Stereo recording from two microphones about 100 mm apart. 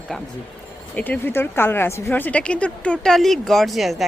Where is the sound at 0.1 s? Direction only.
5° left (ahead or behind).